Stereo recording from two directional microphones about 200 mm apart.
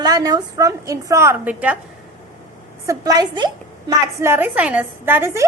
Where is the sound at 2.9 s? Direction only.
20° right (ahead or behind).